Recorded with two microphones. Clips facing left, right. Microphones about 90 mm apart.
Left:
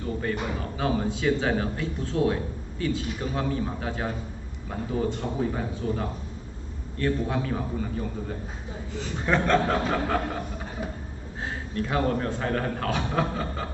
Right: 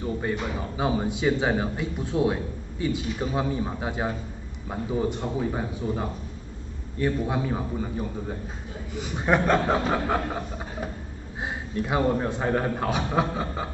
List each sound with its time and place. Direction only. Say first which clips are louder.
0.3 s a man's voice: right 1 dB; 15° right (ahead or behind)
11.4 s a man's voice: right 1 dB; 15° right (ahead or behind)